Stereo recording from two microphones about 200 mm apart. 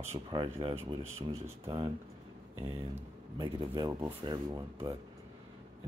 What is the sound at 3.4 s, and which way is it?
Speech, 20° right (ahead or behind).